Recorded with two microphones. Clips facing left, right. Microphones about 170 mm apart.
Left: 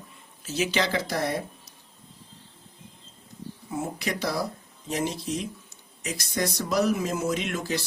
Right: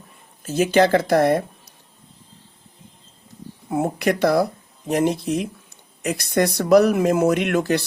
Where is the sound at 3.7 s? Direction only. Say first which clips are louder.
Right 10 dB; 60° right (ahead or behind).